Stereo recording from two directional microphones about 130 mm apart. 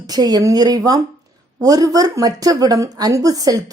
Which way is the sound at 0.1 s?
30° right (ahead or behind).